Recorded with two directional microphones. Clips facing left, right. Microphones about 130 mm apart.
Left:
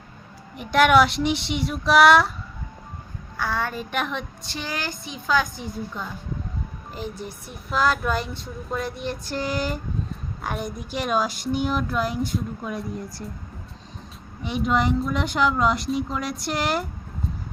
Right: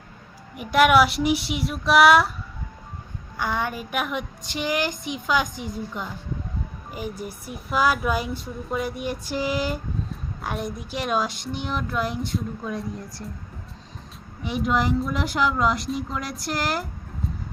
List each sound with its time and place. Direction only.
0.5 s speech: 5° right (ahead or behind)
3.3 s speech: 15° right (ahead or behind); by 13.2 s centre (ahead or behind)
14.4 s speech: centre (ahead or behind)